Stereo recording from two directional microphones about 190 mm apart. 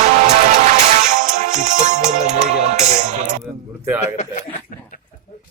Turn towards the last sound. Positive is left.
turn(degrees=40)  # may be behind; listen again after turning